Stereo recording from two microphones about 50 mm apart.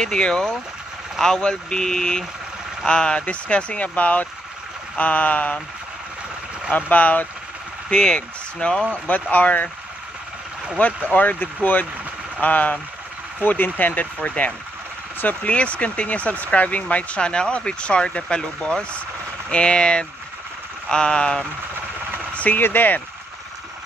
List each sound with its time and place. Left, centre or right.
0.0 s speech: centre; by 5.6 s left
6.7 s speech: left
7.9 s speech: centre
9.0 s speech: left
10.8 s speech: left
22.3 s a sound: left
22.6 s speech: left